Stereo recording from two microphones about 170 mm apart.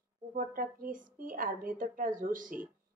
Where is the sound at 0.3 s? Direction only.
55° right (ahead or behind).